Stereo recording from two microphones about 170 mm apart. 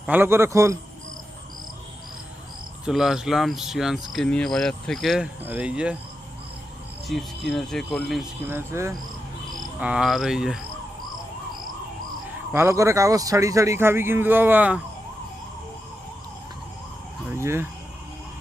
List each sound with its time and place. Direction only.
0.0 s a man's voice: 10° right (ahead or behind)
2.8 s a man's voice: centre (ahead or behind)
7.1 s speech: centre (ahead or behind)
8.5 s a man's voice: 15° right (ahead or behind)
9.8 s speech: 5° right (ahead or behind)
12.5 s a man's voice: 15° right (ahead or behind)
17.2 s a sound: 15° right (ahead or behind)